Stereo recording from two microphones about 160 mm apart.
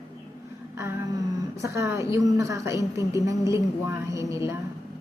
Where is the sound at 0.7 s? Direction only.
15° right (ahead or behind).